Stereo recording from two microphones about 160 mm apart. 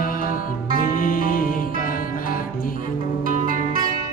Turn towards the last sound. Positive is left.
turn(degrees=-60)  # may be behind; listen again after turning